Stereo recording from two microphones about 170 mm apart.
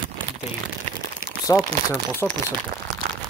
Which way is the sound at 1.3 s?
25° left (ahead or behind).